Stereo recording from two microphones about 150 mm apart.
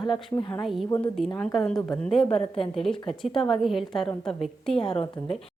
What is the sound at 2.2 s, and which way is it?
Speech, 40° left (ahead or behind).